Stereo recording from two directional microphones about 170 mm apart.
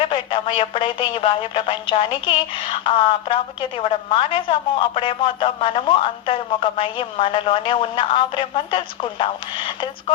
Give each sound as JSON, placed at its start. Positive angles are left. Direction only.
{"t": 0.1, "sound": "speech", "side_deg": 30}